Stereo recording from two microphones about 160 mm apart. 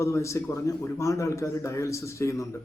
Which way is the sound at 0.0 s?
20° left (ahead or behind).